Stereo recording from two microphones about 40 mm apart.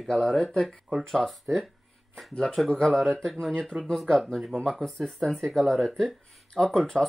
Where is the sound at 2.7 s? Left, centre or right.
Centre.